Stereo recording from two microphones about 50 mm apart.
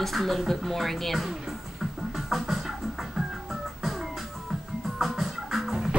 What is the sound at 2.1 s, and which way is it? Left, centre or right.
Music, centre.